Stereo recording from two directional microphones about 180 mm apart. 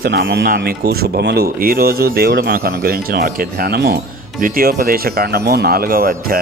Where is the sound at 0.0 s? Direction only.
60° right (ahead or behind).